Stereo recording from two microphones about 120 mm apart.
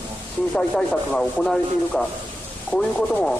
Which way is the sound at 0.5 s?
5° left (ahead or behind).